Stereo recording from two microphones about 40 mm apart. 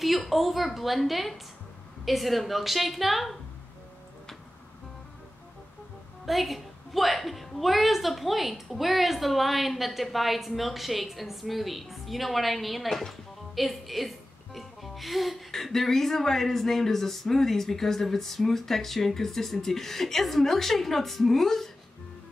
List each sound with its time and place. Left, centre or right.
0.0 s a woman's voice: centre
6.2 s a woman's voice: centre